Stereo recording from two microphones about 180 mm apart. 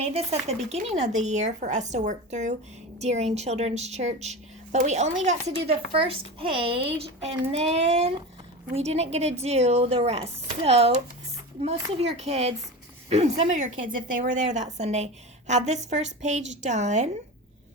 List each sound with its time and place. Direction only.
0.0 s a woman's voice: 35° right (ahead or behind)